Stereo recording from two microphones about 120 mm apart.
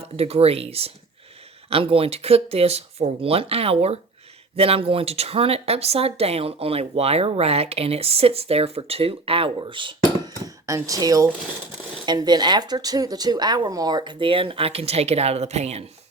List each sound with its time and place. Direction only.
0.2 s speech: 55° right (ahead or behind)
10.4 s speech: 25° right (ahead or behind); by 15.8 s 65° right (ahead or behind)